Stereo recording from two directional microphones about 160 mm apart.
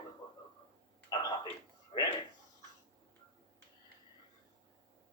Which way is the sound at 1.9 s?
35° left (ahead or behind).